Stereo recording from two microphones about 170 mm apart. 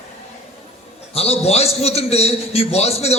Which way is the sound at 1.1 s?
35° left (ahead or behind).